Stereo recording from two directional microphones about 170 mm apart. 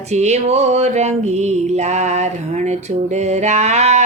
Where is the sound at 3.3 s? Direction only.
40° right (ahead or behind).